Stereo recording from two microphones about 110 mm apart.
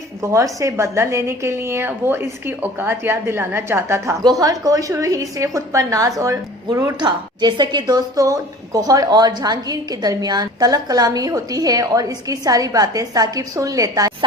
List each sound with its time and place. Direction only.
0.2 s a woman's voice: 25° right (ahead or behind)
4.2 s a woman's voice: 35° right (ahead or behind)